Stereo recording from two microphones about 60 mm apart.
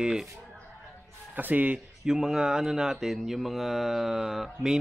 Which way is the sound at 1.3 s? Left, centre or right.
Right.